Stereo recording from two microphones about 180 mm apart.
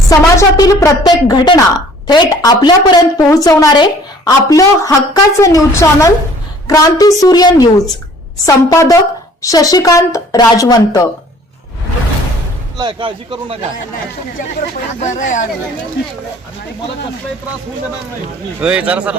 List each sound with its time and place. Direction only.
0.1 s a woman's voice: 20° left (ahead or behind)
12.7 s a man's voice: 25° right (ahead or behind)
15.0 s speech: 45° left (ahead or behind)
18.6 s a man's voice: 5° right (ahead or behind)